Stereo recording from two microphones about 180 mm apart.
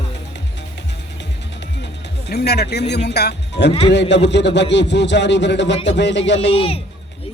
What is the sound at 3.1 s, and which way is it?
Speech, 70° left (ahead or behind).